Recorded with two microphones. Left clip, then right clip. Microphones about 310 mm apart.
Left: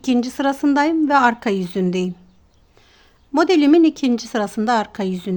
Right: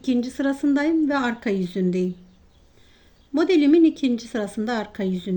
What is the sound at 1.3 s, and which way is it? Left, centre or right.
Speech, left.